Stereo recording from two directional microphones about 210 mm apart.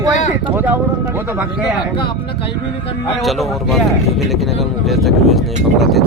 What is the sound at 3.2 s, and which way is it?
Speech, centre (ahead or behind).